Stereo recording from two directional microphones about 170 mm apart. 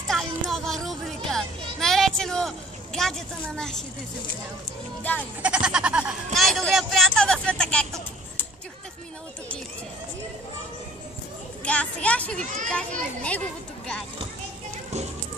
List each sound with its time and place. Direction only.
0.1 s music: centre (ahead or behind)
3.5 s a woman's voice: 5° left (ahead or behind)
5.4 s speech: 5° right (ahead or behind)
11.6 s a woman's voice: 10° left (ahead or behind)